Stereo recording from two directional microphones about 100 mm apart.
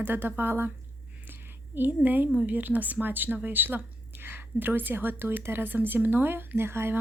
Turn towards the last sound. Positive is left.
turn(degrees=-25)  # may be behind; listen again after turning